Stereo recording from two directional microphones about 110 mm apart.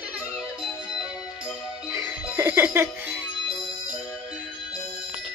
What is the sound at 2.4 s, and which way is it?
Music, 20° right (ahead or behind).